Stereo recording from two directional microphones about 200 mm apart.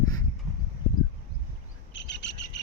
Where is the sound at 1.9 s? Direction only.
65° left (ahead or behind).